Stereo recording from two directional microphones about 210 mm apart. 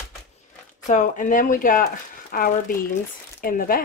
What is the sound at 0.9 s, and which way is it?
Speech, 35° left (ahead or behind).